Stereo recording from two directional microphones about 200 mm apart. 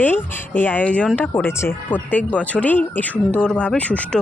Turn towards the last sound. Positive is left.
turn(degrees=5)  # may be behind; listen again after turning